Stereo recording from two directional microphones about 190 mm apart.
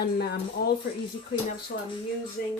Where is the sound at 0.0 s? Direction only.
55° left (ahead or behind).